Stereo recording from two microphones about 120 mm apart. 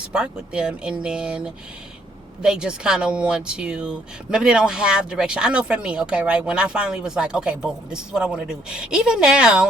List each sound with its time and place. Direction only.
0.1 s speech: 5° right (ahead or behind)